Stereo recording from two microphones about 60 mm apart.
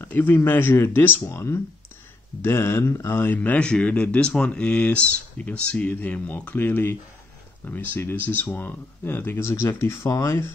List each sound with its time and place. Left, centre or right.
0.0 s speech: left
1.2 s speech: left
3.3 s speech: left
9.4 s speech: left